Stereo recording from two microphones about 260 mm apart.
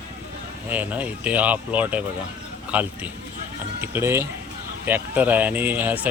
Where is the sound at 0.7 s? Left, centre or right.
Centre.